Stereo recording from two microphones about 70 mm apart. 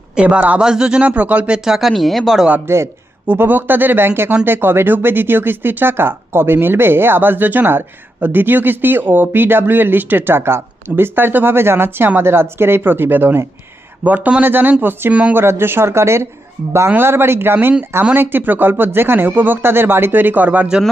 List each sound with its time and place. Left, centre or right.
0.2 s speech: centre
2.6 s speech: right
3.2 s speech: right
14.0 s speech: right